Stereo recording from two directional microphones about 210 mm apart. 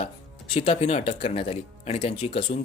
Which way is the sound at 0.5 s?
30° left (ahead or behind).